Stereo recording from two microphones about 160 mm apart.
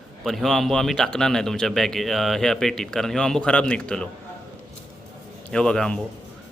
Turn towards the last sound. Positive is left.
turn(degrees=5)  # may be behind; listen again after turning